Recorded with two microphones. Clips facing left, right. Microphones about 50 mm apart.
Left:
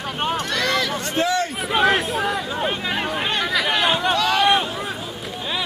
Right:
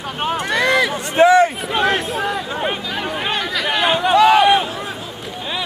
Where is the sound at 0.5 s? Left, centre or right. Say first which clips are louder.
Right 5 dB; centre.